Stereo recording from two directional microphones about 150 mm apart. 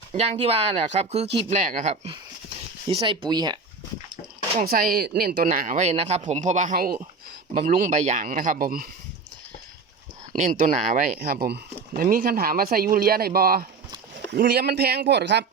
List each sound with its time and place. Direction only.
0.1 s speech: 45° right (ahead or behind)
2.9 s speech: 35° right (ahead or behind)
4.6 s speech: 85° right
7.5 s speech: 65° right (ahead or behind)
10.3 s speech: 60° right (ahead or behind); by 15.0 s 90° right